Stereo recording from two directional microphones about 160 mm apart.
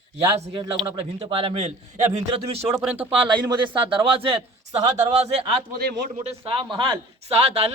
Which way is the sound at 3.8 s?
35° right (ahead or behind).